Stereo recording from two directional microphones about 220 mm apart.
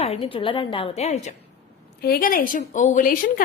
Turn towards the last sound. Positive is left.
turn(degrees=35)  # may be behind; listen again after turning